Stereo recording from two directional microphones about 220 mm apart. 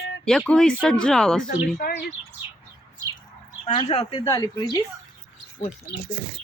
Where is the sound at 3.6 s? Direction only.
25° left (ahead or behind).